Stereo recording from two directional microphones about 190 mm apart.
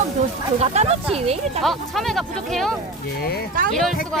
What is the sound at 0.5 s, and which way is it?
Speech, 35° right (ahead or behind).